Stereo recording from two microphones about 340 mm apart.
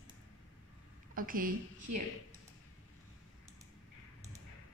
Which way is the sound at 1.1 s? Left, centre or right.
Right.